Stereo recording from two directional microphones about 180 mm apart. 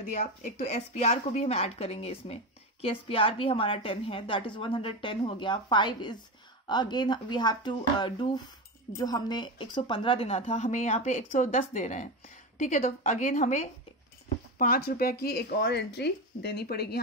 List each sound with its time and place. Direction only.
0.0 s a woman's voice: 40° left (ahead or behind)
14.6 s speech: 55° left (ahead or behind)